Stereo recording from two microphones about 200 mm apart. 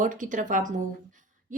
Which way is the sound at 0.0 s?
40° right (ahead or behind).